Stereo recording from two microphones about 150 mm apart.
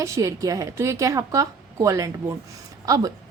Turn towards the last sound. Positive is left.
turn(degrees=-25)  # may be behind; listen again after turning